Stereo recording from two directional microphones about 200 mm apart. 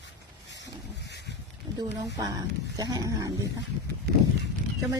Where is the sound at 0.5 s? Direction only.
60° left (ahead or behind).